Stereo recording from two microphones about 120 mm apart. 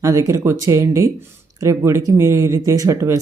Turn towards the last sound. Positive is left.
turn(degrees=-25)  # may be behind; listen again after turning